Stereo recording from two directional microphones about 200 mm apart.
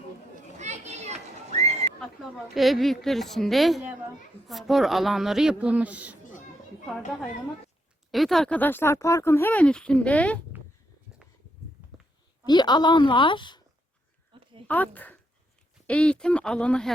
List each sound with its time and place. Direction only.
0.6 s children playing: 35° right (ahead or behind)
2.0 s a woman's voice: centre (ahead or behind)
8.1 s speech: centre (ahead or behind)
12.5 s a woman's voice: 20° left (ahead or behind)
14.3 s a sound: 25° right (ahead or behind)
14.7 s a woman's voice: 10° left (ahead or behind)